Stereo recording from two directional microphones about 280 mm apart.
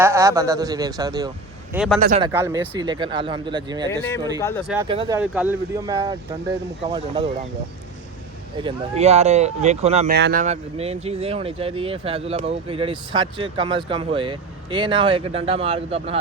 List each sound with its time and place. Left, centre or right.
0.0 s speech: centre
1.7 s speech: centre
2.0 s speech: right
2.2 s speech: centre
3.9 s speech: centre
4.9 s speech: centre
8.5 s speech: centre